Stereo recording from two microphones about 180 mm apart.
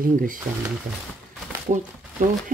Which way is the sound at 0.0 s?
50° right (ahead or behind).